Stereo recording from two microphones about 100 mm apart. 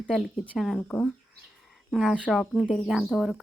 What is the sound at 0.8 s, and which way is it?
Speech, 20° left (ahead or behind).